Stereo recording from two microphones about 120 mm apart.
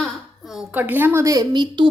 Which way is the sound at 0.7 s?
15° right (ahead or behind).